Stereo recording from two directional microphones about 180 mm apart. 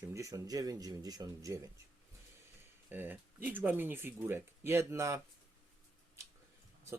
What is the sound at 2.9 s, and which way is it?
Speech, 10° right (ahead or behind).